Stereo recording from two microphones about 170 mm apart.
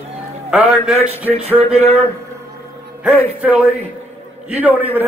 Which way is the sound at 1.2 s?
35° right (ahead or behind).